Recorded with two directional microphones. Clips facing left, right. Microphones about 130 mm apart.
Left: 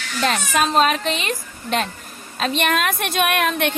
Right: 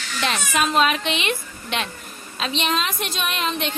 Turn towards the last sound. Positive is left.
turn(degrees=60)  # may be behind; listen again after turning